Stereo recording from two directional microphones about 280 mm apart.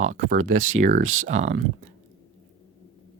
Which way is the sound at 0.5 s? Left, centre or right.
Right.